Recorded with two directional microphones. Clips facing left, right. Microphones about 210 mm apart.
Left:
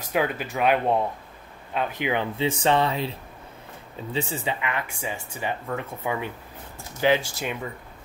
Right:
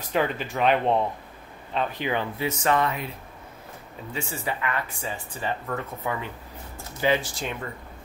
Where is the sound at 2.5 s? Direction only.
30° left (ahead or behind).